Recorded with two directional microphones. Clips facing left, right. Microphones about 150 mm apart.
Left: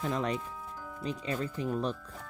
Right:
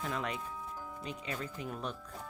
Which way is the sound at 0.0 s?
35° left (ahead or behind).